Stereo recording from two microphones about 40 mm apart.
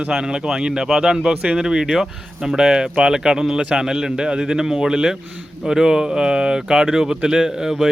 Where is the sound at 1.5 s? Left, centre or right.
Centre.